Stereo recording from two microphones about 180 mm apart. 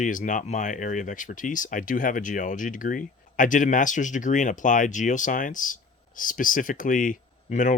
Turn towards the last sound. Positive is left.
turn(degrees=45)  # may be behind; listen again after turning